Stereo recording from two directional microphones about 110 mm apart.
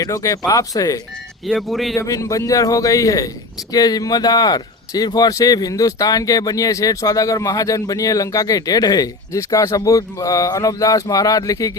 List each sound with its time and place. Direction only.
0.0 s speech: 30° left (ahead or behind)
1.5 s speech: centre (ahead or behind)
2.0 s speech: 30° left (ahead or behind)